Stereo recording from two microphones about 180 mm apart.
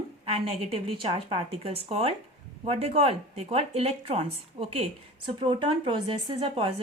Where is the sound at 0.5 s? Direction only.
35° right (ahead or behind).